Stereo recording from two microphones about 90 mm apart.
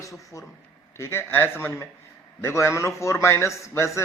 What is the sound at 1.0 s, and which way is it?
A man's voice, 25° left (ahead or behind).